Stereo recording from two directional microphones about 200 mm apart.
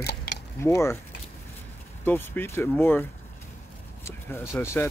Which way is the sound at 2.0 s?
10° left (ahead or behind).